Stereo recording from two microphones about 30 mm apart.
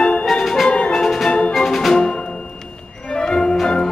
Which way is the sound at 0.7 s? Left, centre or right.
Left.